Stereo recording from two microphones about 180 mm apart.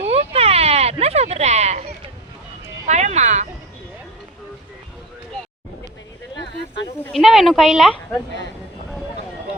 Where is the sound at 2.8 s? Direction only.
40° right (ahead or behind).